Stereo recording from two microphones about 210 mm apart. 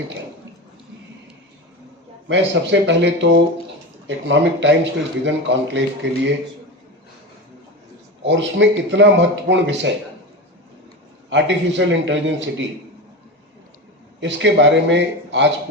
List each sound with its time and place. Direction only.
2.2 s a man's voice: 60° right (ahead or behind)
8.2 s a man's voice: 60° right (ahead or behind)
11.3 s a man's voice: 60° right (ahead or behind)
14.2 s a man's voice: 60° right (ahead or behind)